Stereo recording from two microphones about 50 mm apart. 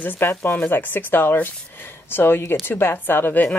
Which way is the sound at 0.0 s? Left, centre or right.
Left.